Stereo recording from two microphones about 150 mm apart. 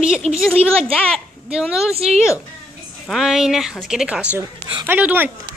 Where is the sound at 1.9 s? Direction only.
45° right (ahead or behind).